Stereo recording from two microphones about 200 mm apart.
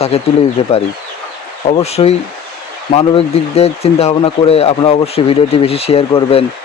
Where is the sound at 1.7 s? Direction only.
30° left (ahead or behind).